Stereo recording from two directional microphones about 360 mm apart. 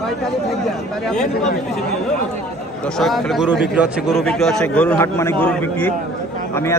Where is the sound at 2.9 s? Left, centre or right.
Centre.